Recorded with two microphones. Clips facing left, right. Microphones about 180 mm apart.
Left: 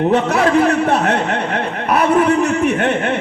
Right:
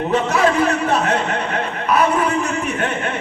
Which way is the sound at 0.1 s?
60° left (ahead or behind).